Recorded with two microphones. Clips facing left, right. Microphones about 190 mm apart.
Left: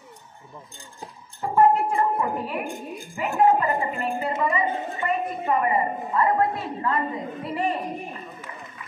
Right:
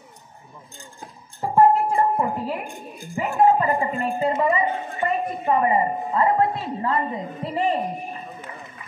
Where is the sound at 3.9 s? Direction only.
25° right (ahead or behind).